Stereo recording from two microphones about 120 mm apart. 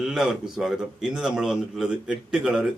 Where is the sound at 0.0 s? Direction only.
5° right (ahead or behind).